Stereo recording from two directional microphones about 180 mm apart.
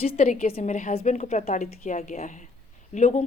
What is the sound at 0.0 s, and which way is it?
Speech, 35° left (ahead or behind).